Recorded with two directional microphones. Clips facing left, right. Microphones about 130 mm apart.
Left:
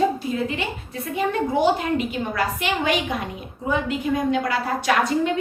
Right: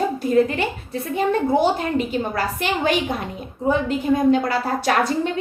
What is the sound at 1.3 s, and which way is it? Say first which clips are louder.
A woman's voice: right 2 dB; 35° right (ahead or behind).